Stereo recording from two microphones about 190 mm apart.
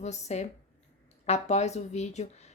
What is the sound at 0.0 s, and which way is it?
A woman's voice, 35° left (ahead or behind).